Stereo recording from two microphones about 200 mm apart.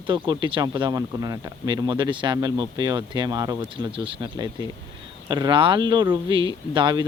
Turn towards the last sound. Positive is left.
turn(degrees=-25)  # may be behind; listen again after turning